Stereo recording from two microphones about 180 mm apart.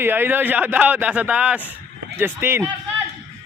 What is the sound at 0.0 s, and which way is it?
A man's voice, 10° right (ahead or behind).